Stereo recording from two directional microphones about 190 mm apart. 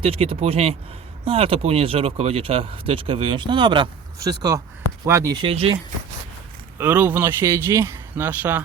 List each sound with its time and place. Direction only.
0.0 s speech: 30° right (ahead or behind)
6.7 s a man's voice: 10° right (ahead or behind)